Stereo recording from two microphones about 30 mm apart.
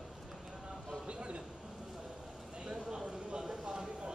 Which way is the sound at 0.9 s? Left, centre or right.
Right.